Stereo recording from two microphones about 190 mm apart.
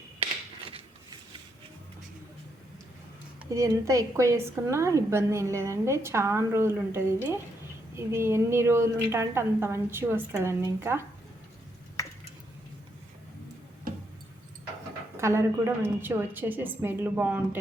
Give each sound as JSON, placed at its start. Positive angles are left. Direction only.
{"t": 3.5, "sound": "a woman's voice", "side_deg": -15}
{"t": 12.0, "sound": "a sound", "side_deg": 15}
{"t": 15.2, "sound": "a woman's voice", "side_deg": -15}